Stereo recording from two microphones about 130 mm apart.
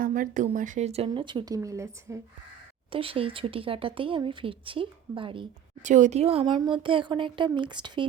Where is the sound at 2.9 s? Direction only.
45° right (ahead or behind).